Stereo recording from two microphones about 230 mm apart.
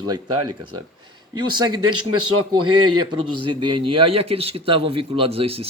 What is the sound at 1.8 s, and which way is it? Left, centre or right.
A man's voice, right.